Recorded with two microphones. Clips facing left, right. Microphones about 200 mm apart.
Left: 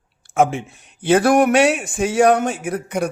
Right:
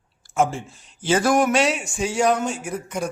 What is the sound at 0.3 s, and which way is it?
Speech, 60° left (ahead or behind).